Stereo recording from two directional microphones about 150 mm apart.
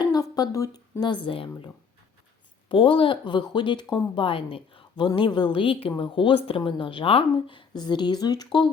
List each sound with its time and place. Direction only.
0.0 s speech: 25° left (ahead or behind)